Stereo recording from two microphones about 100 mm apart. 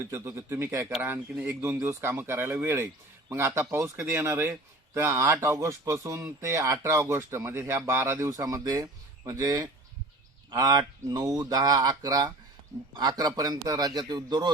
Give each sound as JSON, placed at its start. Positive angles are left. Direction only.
{"t": 0.0, "sound": "speech", "side_deg": -25}